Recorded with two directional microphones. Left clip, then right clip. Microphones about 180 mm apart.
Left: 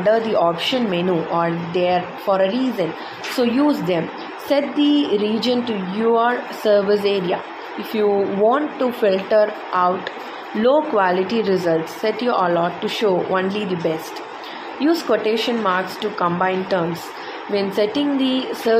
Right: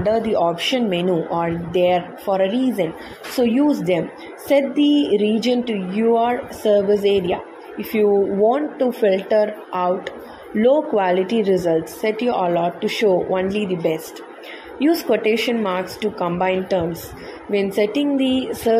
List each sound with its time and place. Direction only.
0.3 s speech: 20° right (ahead or behind)
2.4 s speech: 15° left (ahead or behind)
3.4 s speech: 20° right (ahead or behind)
15.0 s speech: 20° right (ahead or behind)